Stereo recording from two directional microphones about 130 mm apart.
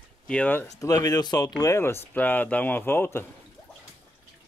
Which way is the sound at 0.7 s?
25° left (ahead or behind).